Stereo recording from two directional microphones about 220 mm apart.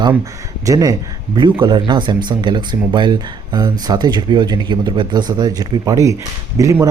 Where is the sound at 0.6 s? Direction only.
15° right (ahead or behind).